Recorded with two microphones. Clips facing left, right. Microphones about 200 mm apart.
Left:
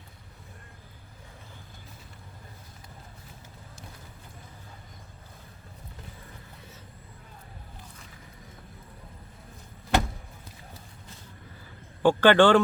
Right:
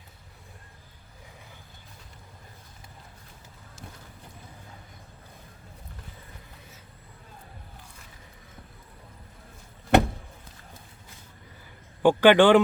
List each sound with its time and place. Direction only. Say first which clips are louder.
9.9 s vehicle: right 6 dB; 60° right (ahead or behind)
12.0 s a man's voice: right 2 dB; 15° right (ahead or behind)